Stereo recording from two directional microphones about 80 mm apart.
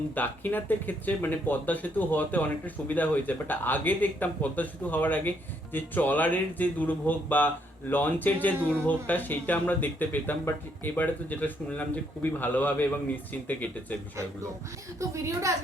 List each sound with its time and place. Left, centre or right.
0.1 s speech: left
14.9 s a woman's voice: right